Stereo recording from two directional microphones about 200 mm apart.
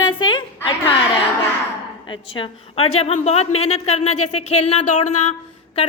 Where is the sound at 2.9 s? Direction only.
35° left (ahead or behind).